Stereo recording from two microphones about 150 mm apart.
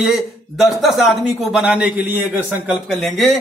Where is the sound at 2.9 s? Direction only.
Centre (ahead or behind).